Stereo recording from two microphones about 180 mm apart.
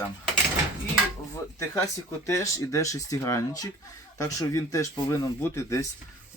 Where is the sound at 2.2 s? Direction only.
15° left (ahead or behind).